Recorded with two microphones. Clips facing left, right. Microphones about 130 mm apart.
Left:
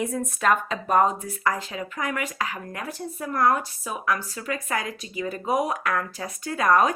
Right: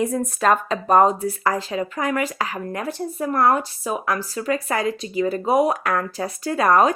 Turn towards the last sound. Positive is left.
turn(degrees=-35)  # may be behind; listen again after turning